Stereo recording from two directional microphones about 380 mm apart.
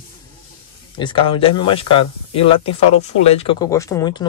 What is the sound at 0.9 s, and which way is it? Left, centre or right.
Speech, centre.